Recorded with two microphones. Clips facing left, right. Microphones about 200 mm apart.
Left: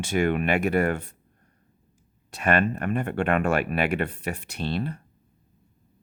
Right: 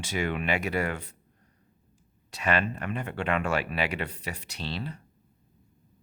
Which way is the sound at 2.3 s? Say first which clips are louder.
Left 4 dB; 55° left (ahead or behind).